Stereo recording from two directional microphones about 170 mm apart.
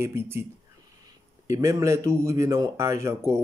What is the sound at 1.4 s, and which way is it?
Speech, 15° right (ahead or behind).